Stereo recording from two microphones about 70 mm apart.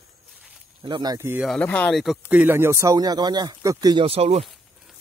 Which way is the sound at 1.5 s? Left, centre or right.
Centre.